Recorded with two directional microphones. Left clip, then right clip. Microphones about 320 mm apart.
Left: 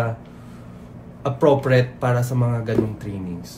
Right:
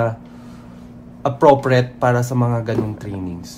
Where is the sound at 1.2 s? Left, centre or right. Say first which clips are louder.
Right 4 dB; centre.